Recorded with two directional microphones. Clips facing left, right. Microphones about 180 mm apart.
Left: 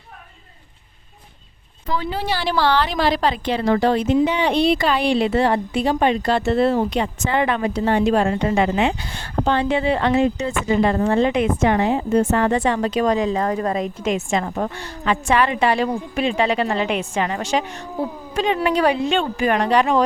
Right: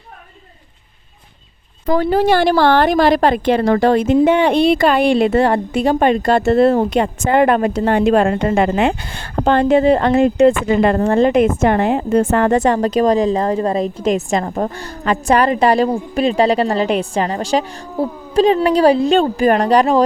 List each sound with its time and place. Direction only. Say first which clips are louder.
1.9 s a woman's voice: right 10 dB; 45° right (ahead or behind)